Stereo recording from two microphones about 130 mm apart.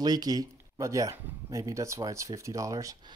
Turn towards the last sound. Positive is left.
turn(degrees=-30)  # may be behind; listen again after turning